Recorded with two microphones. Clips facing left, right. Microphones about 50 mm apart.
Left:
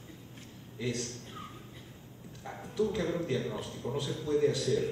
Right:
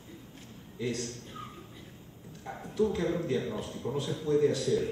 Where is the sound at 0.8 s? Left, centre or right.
Right.